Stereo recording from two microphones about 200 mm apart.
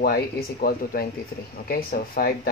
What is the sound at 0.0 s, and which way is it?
Speech, 50° left (ahead or behind).